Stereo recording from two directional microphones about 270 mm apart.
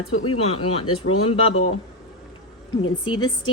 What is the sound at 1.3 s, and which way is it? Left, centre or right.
Speech, centre.